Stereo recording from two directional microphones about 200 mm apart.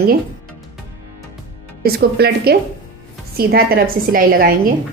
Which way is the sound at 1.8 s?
50° right (ahead or behind).